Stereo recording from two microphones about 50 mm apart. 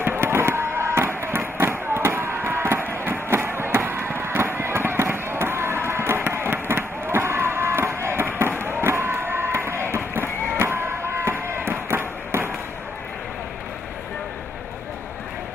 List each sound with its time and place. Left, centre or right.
0.0 s a sound: right
5.9 s fireworks: right
9.2 s music: right